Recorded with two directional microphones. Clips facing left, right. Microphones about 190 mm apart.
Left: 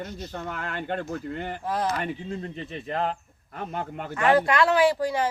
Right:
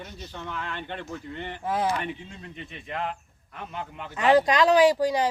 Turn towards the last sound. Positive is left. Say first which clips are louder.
# right 2 dB
turn(degrees=-15)  # may be behind; listen again after turning